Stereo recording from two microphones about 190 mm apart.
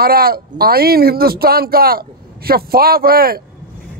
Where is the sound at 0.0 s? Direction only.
55° right (ahead or behind).